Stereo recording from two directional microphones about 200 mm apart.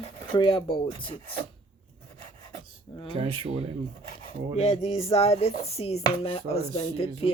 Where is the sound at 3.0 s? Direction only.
25° left (ahead or behind).